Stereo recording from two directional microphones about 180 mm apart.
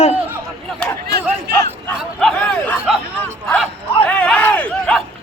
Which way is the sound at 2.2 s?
Centre (ahead or behind).